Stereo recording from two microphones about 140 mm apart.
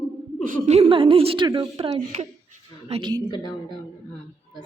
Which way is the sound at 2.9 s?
35° right (ahead or behind).